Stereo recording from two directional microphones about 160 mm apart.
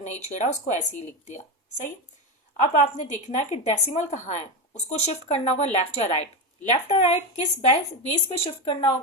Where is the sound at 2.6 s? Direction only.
50° left (ahead or behind).